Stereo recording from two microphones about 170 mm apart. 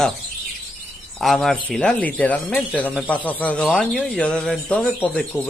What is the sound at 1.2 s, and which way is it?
Speech, centre (ahead or behind).